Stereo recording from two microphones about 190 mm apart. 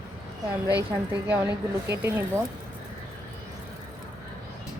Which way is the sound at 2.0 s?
15° right (ahead or behind).